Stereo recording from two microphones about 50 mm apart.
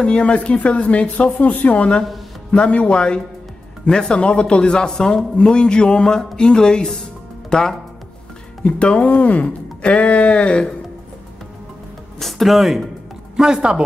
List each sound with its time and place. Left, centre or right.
0.0 s a man's voice: left
8.6 s speech: left
12.2 s speech: centre
13.4 s speech: centre